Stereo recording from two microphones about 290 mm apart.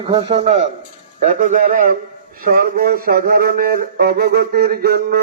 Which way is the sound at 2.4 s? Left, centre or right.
Right.